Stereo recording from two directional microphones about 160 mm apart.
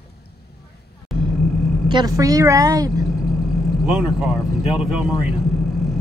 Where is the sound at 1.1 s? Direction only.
Centre (ahead or behind).